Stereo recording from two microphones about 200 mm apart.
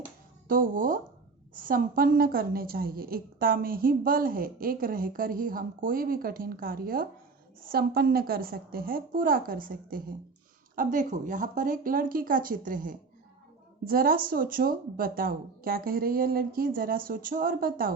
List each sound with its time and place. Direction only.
0.4 s a woman's voice: 45° right (ahead or behind)